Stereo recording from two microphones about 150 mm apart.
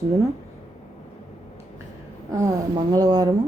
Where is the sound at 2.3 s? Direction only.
25° right (ahead or behind).